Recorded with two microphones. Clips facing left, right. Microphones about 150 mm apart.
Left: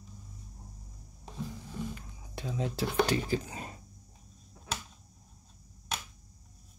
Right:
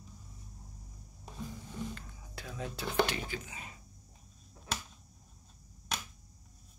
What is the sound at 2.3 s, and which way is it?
Speech, 25° left (ahead or behind).